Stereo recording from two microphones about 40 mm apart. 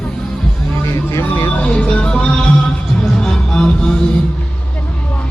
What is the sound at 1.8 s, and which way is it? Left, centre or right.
Music, left.